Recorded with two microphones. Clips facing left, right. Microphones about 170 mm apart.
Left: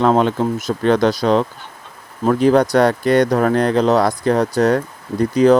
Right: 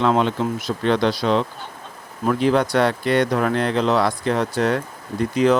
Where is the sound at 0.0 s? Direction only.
45° left (ahead or behind).